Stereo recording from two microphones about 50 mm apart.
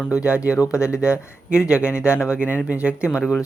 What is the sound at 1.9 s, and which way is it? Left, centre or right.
Speech, left.